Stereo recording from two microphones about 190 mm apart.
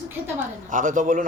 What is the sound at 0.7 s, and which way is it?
Speech, 45° right (ahead or behind).